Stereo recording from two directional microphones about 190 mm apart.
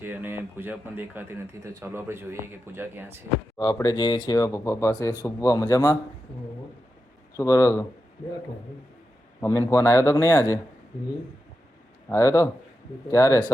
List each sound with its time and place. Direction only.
0.0 s speech: 10° right (ahead or behind)
3.6 s speech: 20° left (ahead or behind)
7.3 s speech: 15° left (ahead or behind)
9.4 s speech: 15° left (ahead or behind)
12.0 s speech: 15° left (ahead or behind)